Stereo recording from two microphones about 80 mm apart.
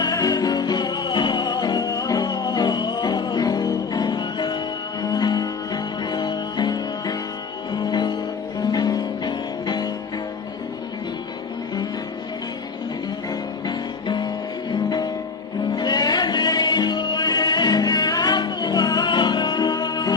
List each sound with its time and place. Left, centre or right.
0.0 s music: left
5.0 s music: left
13.7 s music: left